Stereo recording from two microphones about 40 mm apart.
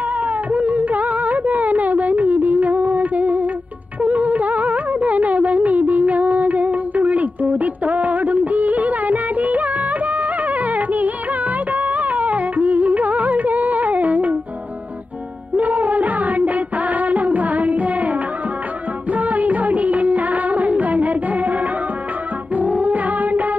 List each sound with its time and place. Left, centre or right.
0.2 s music: right
15.5 s music: right
19.1 s music of bollywood: right
22.6 s music: right